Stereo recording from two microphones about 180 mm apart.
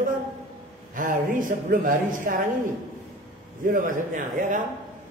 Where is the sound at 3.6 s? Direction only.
50° right (ahead or behind).